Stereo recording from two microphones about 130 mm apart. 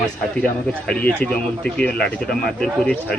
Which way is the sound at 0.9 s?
10° left (ahead or behind).